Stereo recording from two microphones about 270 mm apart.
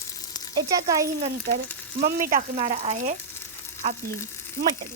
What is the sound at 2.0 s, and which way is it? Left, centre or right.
Speech, right.